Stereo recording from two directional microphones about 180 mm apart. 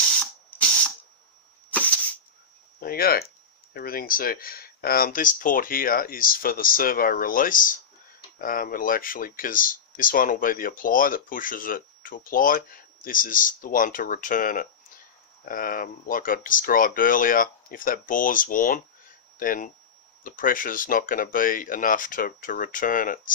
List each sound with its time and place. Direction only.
2.8 s speech: 55° left (ahead or behind)